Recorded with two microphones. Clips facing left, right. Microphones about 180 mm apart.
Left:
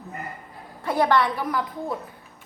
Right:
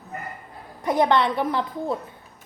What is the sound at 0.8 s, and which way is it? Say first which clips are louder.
A woman's voice: right 1 dB; 20° right (ahead or behind).